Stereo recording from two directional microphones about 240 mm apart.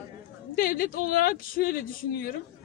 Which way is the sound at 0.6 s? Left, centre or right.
Left.